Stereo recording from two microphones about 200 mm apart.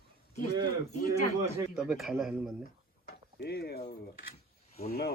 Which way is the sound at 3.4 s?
50° left (ahead or behind).